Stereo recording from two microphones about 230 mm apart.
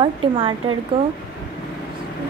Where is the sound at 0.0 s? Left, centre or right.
Centre.